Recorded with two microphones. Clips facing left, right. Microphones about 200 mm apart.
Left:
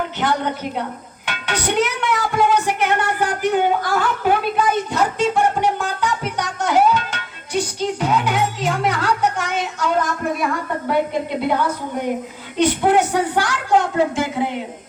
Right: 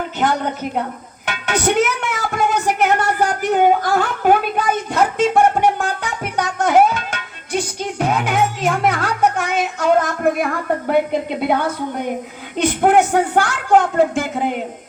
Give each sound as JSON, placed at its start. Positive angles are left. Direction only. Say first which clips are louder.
{"t": 0.2, "sound": "a sound", "louder": "right 3 dB", "side_deg": -45}
{"t": 1.2, "sound": "music", "louder": "right 5 dB", "side_deg": -45}
{"t": 12.5, "sound": "a woman's voice", "louder": "right 1 dB", "side_deg": -50}